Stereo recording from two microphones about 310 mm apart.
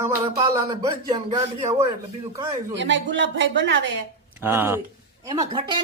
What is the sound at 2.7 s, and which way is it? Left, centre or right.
A woman's voice, right.